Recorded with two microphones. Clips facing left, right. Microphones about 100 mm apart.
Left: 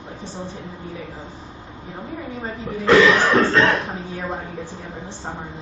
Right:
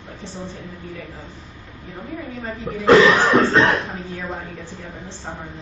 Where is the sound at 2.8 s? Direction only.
20° right (ahead or behind).